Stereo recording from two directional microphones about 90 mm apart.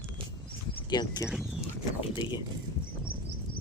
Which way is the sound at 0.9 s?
55° left (ahead or behind).